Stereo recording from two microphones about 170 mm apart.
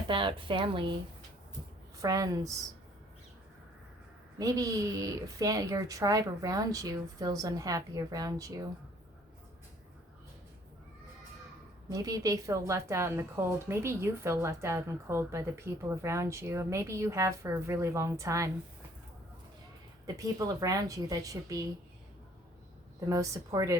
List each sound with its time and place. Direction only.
0.1 s a woman's voice: 30° right (ahead or behind)
2.0 s a woman's voice: 20° right (ahead or behind)
4.4 s a woman's voice: 20° right (ahead or behind)
11.9 s a woman's voice: 20° right (ahead or behind)
20.1 s a woman's voice: 20° right (ahead or behind)
23.0 s a woman's voice: 20° right (ahead or behind)